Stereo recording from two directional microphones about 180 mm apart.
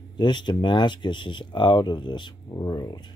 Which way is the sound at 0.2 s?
25° left (ahead or behind).